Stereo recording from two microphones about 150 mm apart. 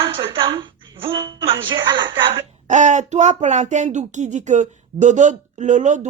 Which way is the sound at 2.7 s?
55° right (ahead or behind).